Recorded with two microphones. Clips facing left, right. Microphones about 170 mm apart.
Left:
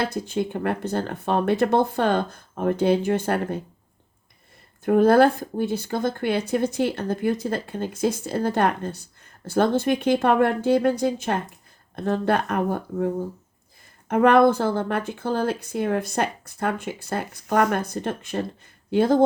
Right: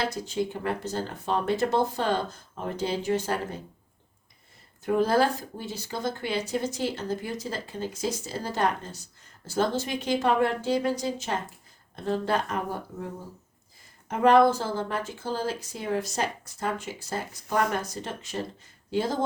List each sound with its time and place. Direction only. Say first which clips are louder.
0.0 s speech: left 4 dB; 55° left (ahead or behind)
4.9 s speech: left 7 dB; 55° left (ahead or behind)
14.1 s speech: left 3 dB; 60° left (ahead or behind)